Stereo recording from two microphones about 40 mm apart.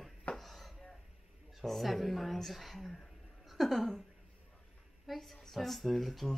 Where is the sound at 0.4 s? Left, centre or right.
Centre.